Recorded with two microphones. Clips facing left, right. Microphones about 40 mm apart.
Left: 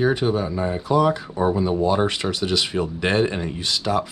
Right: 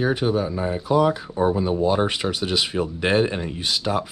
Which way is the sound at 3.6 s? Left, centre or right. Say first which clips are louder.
Left 1 dB; centre.